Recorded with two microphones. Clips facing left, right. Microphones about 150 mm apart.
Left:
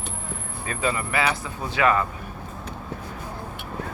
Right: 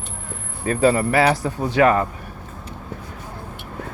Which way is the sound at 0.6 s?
40° right (ahead or behind).